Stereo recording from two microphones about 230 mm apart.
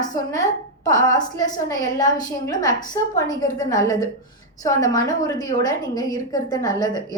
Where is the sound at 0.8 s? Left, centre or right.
Centre.